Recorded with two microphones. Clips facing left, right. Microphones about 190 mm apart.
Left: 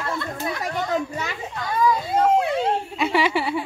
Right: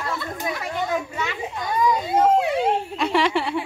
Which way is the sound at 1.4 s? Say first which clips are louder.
Even; 20° right (ahead or behind).